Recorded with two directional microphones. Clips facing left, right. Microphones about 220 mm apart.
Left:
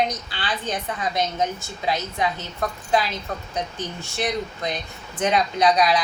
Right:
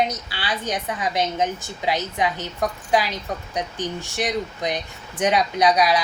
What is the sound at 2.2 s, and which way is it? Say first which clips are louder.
Speech: right 2 dB; 15° right (ahead or behind).